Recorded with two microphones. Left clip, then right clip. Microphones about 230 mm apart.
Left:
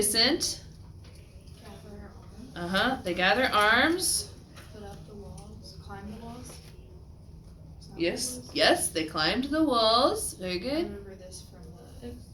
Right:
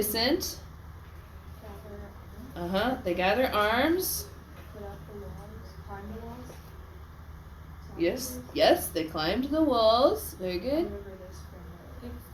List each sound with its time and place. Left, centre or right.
0.0 s speech: centre
2.5 s speech: centre
7.9 s speech: centre